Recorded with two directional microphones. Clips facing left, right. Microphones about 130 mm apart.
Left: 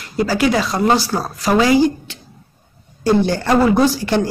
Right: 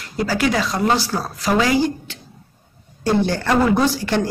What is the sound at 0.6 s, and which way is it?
Speech, 30° left (ahead or behind).